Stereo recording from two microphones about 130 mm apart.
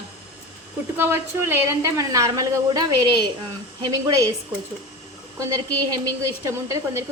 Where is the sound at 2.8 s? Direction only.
35° right (ahead or behind).